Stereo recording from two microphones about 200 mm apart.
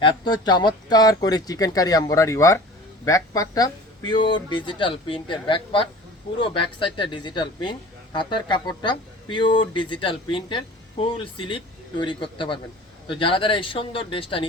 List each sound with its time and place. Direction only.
0.0 s a man's voice: 20° left (ahead or behind)